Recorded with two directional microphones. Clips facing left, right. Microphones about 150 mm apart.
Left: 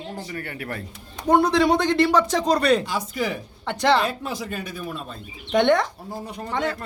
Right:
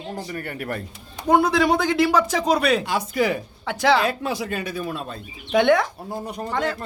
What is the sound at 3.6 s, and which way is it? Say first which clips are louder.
Speech: even; 5° right (ahead or behind).